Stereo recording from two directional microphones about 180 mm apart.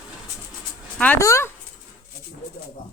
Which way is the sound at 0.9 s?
10° left (ahead or behind).